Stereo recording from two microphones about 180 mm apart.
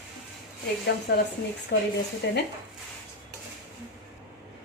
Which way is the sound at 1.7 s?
65° left (ahead or behind).